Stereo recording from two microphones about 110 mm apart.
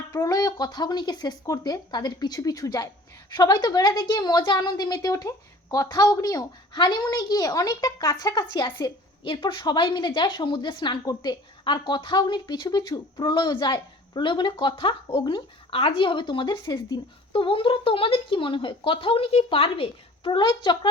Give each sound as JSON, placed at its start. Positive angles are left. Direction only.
{"t": 0.1, "sound": "a woman's voice", "side_deg": 30}
{"t": 17.3, "sound": "a woman's voice", "side_deg": 55}